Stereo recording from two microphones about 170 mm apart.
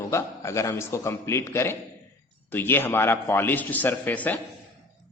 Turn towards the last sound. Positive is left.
turn(degrees=10)  # may be behind; listen again after turning